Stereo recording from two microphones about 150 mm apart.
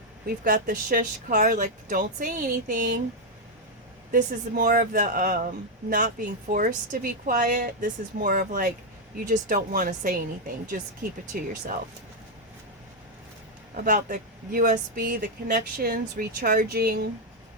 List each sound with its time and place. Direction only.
0.3 s speech: 80° right
4.1 s speech: 65° right (ahead or behind)
13.7 s speech: 65° right (ahead or behind); by 17.0 s 90° right